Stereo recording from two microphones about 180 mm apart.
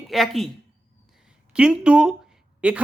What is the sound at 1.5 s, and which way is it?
A man's voice, 5° right (ahead or behind).